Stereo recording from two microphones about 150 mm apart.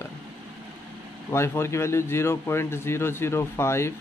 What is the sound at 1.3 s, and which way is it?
Speech, 15° left (ahead or behind).